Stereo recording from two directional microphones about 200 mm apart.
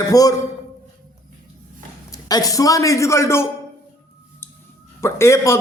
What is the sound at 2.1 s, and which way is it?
A man's voice, 20° left (ahead or behind).